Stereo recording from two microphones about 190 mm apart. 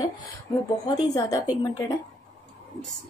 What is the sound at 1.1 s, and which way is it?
Speech, 20° left (ahead or behind).